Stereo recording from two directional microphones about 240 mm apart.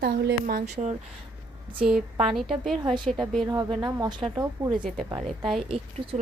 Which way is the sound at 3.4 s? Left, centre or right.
Centre.